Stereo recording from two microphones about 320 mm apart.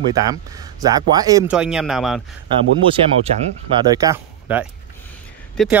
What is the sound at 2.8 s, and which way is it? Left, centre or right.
Speech, centre.